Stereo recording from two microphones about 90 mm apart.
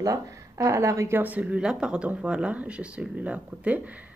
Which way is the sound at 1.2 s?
15° right (ahead or behind).